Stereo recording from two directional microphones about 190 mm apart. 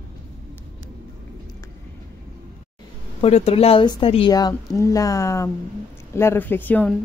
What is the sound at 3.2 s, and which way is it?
Speech, 30° left (ahead or behind).